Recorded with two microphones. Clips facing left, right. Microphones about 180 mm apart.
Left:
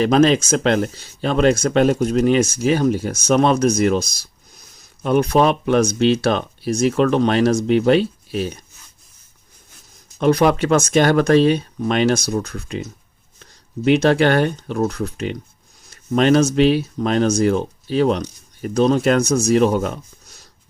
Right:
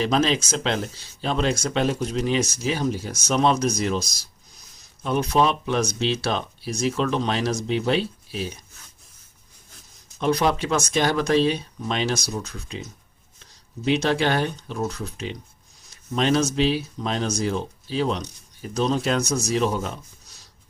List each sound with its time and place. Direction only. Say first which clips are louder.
0.0 s speech: left 7 dB; 50° left (ahead or behind)
10.2 s speech: left 6 dB; 60° left (ahead or behind)